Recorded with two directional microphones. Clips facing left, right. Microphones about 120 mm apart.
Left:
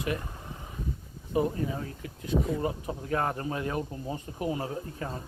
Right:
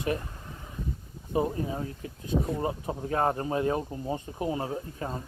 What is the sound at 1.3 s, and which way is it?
Speech, 25° right (ahead or behind).